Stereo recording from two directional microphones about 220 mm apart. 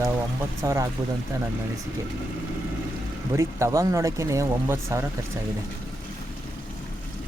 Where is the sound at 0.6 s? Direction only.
15° right (ahead or behind).